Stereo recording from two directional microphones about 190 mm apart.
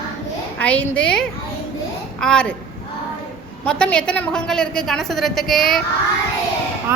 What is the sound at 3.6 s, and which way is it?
A woman's voice, 5° left (ahead or behind).